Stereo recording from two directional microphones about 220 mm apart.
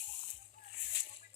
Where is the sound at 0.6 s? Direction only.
35° left (ahead or behind).